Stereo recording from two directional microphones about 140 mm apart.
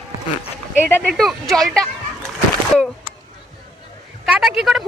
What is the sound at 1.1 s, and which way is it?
Speech, centre (ahead or behind).